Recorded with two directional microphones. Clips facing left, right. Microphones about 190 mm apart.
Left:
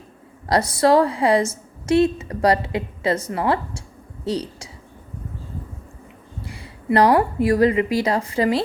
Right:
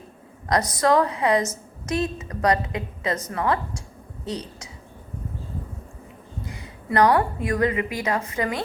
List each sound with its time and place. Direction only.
0.4 s a woman's voice: 30° left (ahead or behind)
6.4 s a sound: 30° left (ahead or behind)
7.4 s a woman's voice: 30° left (ahead or behind)